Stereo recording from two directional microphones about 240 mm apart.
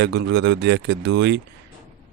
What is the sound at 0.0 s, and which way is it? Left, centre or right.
Speech, right.